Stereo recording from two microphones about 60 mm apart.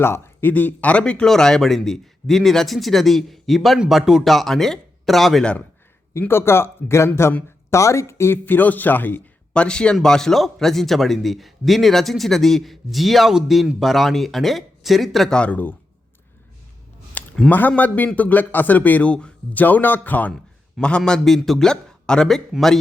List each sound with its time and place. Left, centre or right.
0.0 s a man's voice: left
0.5 s a man's voice: left
1.3 s a man's voice: centre
5.4 s a man's voice: centre
6.1 s speech: left
9.5 s a man's voice: centre
15.3 s a man's voice: centre
17.2 s a sound: left
17.5 s a man's voice: left
19.6 s a man's voice: left
20.8 s a man's voice: centre